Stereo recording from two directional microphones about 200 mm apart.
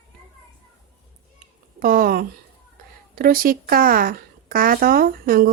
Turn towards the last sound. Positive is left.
turn(degrees=-45)  # may be behind; listen again after turning